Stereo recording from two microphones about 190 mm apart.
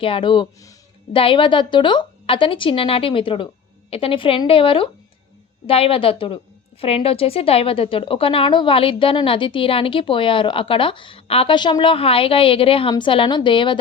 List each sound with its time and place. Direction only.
0.0 s speech: 25° left (ahead or behind)